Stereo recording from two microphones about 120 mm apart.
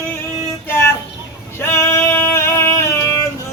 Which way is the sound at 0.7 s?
20° left (ahead or behind).